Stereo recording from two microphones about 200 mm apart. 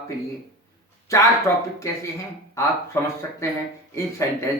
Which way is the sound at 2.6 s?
15° left (ahead or behind).